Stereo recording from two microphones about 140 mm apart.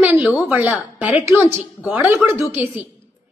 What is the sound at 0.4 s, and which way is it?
A woman's voice, 10° right (ahead or behind).